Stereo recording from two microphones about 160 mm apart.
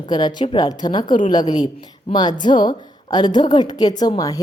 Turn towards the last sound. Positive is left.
turn(degrees=25)  # may be behind; listen again after turning